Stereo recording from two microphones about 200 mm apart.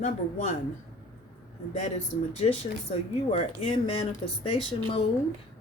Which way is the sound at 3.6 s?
25° left (ahead or behind).